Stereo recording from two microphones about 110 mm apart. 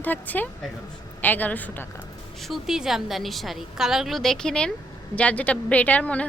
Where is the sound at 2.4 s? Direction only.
Centre (ahead or behind).